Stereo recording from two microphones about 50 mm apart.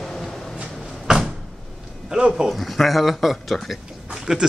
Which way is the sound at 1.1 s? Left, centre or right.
Centre.